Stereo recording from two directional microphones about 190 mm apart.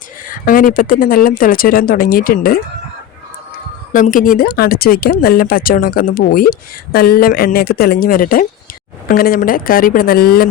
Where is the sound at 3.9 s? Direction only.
45° left (ahead or behind).